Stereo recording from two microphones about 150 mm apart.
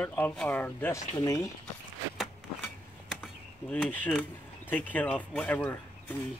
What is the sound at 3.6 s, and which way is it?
Speech, 5° left (ahead or behind).